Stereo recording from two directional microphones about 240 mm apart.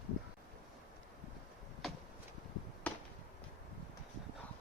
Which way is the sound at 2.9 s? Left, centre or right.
Centre.